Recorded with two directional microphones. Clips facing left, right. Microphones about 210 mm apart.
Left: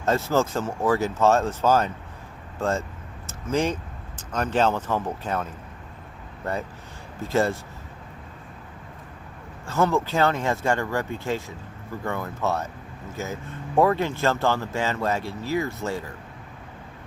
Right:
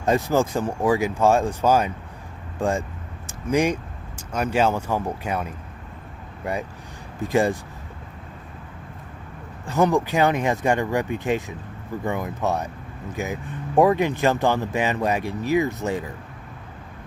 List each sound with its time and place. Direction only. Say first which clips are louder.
0.0 s speech: right 2 dB; 15° right (ahead or behind)
3.2 s vehicle: right 3 dB; 15° right (ahead or behind)
4.3 s speech: right 1 dB; 10° right (ahead or behind)
9.6 s speech: right 3 dB; 15° right (ahead or behind)